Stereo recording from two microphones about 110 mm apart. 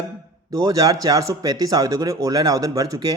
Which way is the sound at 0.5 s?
35° right (ahead or behind).